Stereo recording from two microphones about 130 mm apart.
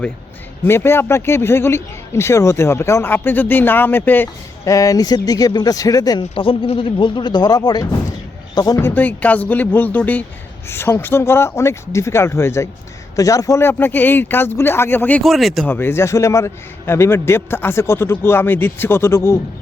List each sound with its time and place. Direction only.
0.6 s a man's voice: 20° left (ahead or behind)
4.6 s a man's voice: 25° left (ahead or behind)
6.3 s speech: 45° left (ahead or behind)
8.8 s a man's voice: 15° left (ahead or behind)
15.2 s speech: centre (ahead or behind)
15.6 s a man's voice: 15° left (ahead or behind)